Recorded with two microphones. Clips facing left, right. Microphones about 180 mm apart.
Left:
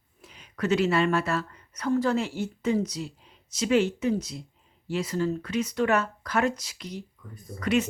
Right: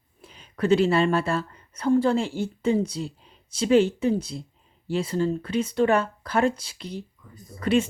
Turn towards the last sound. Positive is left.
turn(degrees=-30)  # may be behind; listen again after turning